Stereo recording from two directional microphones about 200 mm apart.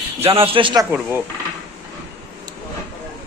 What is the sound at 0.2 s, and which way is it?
Speech, 25° right (ahead or behind).